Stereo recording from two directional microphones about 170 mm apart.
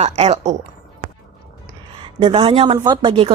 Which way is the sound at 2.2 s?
35° right (ahead or behind).